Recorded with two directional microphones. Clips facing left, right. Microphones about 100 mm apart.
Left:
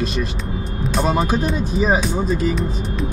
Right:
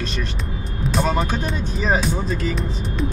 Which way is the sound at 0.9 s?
5° left (ahead or behind).